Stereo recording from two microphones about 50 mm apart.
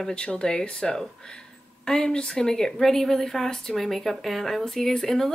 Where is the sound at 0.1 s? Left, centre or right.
Centre.